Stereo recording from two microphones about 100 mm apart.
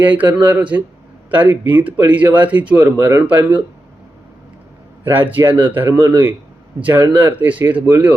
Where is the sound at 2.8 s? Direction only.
25° right (ahead or behind).